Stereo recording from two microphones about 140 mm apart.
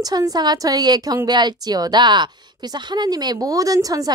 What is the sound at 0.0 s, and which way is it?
A woman's voice, 25° right (ahead or behind).